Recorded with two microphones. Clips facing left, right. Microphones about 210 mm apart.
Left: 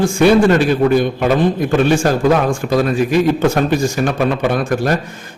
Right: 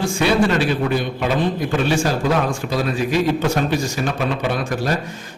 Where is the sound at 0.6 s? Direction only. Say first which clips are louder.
Left 7 dB; 50° left (ahead or behind).